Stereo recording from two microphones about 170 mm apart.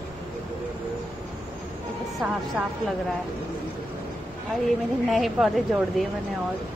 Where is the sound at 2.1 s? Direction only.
5° right (ahead or behind).